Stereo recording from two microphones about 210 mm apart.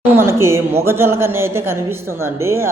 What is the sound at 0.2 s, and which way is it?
Speech, 10° right (ahead or behind).